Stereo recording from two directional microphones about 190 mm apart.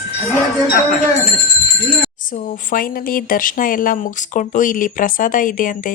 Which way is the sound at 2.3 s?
45° left (ahead or behind).